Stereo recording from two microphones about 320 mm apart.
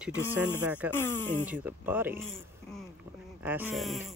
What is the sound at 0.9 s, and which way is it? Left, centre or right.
Speech, centre.